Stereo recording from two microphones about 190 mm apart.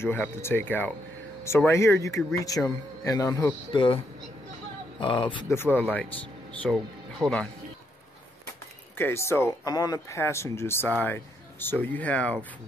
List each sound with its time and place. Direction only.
0.0 s a man's voice: 10° left (ahead or behind)
5.0 s speech: 25° left (ahead or behind)
5.5 s a man's voice: 10° left (ahead or behind)
8.9 s a man's voice: 15° left (ahead or behind)